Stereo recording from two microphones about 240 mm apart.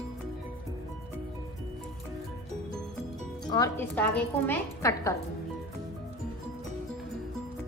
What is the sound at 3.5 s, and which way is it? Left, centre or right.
A woman's voice, centre.